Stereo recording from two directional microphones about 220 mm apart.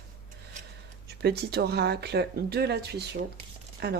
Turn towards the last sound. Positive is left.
turn(degrees=-50)  # may be behind; listen again after turning